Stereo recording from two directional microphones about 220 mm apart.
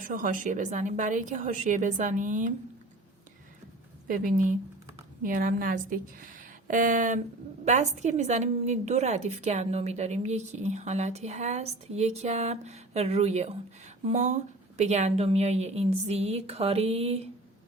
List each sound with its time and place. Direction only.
0.0 s a woman's voice: 35° right (ahead or behind)
4.1 s a woman's voice: 40° right (ahead or behind)